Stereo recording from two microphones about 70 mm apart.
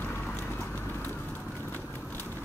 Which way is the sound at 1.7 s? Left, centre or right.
Left.